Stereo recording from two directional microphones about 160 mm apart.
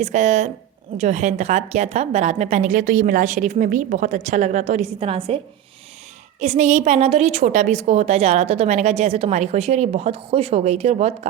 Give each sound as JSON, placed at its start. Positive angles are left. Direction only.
{"t": 0.0, "sound": "a woman's voice", "side_deg": -45}
{"t": 6.4, "sound": "a woman's voice", "side_deg": -45}